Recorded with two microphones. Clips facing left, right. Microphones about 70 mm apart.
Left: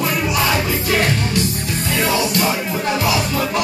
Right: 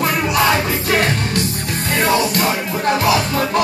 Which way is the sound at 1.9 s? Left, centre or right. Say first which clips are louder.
Right 3 dB; right.